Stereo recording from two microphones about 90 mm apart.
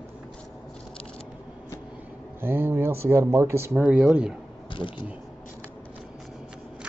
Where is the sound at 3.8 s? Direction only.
15° right (ahead or behind).